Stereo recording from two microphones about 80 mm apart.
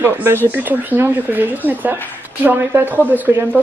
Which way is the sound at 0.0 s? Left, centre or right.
Right.